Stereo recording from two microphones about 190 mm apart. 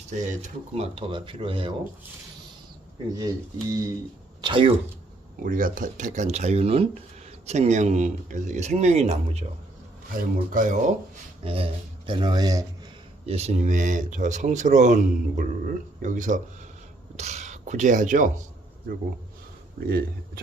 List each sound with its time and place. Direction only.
0.1 s speech: 40° right (ahead or behind)
3.2 s speech: 15° right (ahead or behind)
5.4 s speech: 45° right (ahead or behind)
11.4 s speech: 30° right (ahead or behind)
13.2 s speech: 35° right (ahead or behind)
19.9 s speech: 50° right (ahead or behind)